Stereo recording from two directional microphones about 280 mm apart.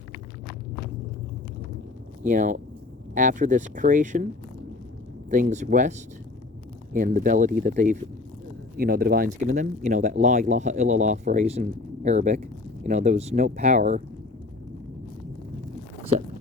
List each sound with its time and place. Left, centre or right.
2.2 s speech: right
5.3 s speech: right
6.9 s speech: right